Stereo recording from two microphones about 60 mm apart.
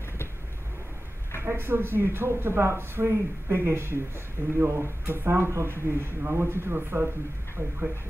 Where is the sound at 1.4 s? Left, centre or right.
Right.